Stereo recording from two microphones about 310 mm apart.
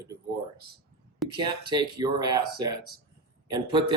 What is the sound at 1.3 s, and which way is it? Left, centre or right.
A man's voice, centre.